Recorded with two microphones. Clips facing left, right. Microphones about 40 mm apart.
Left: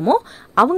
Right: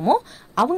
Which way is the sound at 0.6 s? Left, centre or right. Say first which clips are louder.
Left 5 dB; left.